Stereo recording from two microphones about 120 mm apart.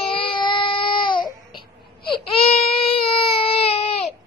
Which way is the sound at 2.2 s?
55° left (ahead or behind).